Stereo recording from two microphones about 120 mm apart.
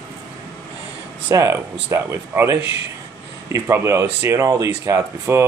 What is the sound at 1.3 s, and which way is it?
Speech, 25° right (ahead or behind).